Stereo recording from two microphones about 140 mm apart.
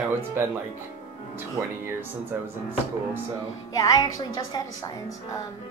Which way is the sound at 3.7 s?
25° left (ahead or behind).